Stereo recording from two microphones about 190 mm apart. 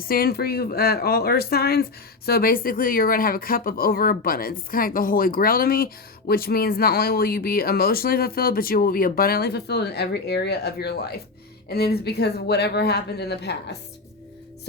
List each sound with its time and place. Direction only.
0.0 s speech: 50° left (ahead or behind)